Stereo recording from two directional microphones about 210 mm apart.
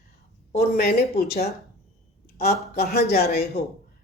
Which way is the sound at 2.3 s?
50° left (ahead or behind).